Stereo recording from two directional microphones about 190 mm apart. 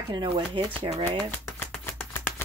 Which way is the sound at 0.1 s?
25° right (ahead or behind).